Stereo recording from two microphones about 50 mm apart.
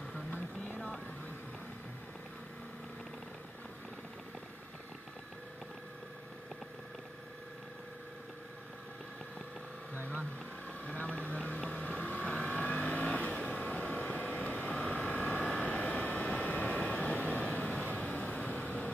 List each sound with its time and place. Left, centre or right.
0.7 s vehicle: centre
10.9 s vehicle: left